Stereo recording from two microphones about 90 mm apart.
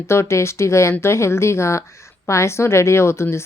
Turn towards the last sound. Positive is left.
turn(degrees=30)  # may be behind; listen again after turning